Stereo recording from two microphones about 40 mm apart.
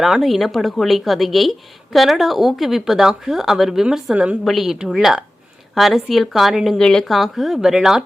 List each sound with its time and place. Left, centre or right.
0.0 s a woman's voice: centre
4.5 s a woman's voice: centre
4.9 s a woman's voice: centre
6.7 s speech: centre
7.0 s speech: centre